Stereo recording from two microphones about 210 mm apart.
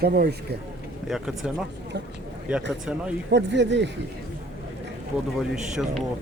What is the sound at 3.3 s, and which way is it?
Speech, 55° right (ahead or behind).